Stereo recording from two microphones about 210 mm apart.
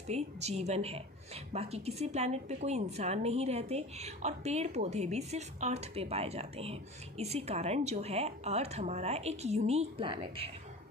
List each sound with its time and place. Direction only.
0.1 s a woman's voice: 30° right (ahead or behind)